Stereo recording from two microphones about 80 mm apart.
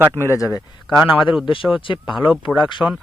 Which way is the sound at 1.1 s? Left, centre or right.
Left.